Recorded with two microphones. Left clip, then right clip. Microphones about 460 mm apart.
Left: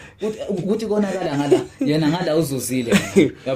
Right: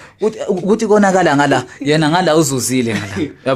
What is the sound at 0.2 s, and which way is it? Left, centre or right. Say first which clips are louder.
Speech: right 8 dB; right.